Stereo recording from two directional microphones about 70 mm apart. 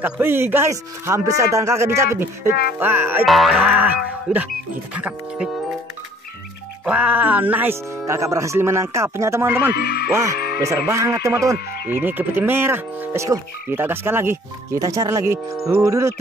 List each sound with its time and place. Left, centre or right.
0.0 s speech: right
3.3 s boing: centre
3.6 s speech: right
6.9 s speech: right
7.9 s speech: right
11.9 s speech: right
14.8 s speech: right